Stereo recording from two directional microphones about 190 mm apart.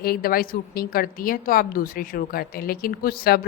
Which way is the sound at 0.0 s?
50° left (ahead or behind).